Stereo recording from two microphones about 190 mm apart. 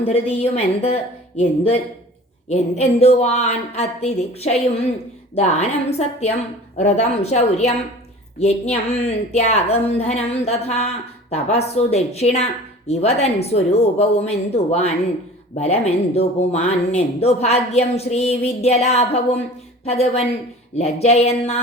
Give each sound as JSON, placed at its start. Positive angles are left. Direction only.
{"t": 0.0, "sound": "a woman's voice", "side_deg": 35}